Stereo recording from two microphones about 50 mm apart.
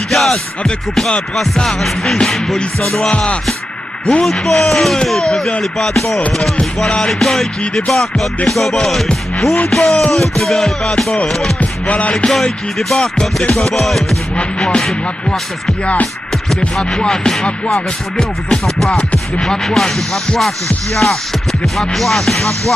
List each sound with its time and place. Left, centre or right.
0.1 s music: centre
3.1 s music: left
4.2 s music: centre
11.9 s music: left
12.7 s music: centre
14.3 s music: centre
15.8 s music: left
16.9 s music: centre
20.9 s music: centre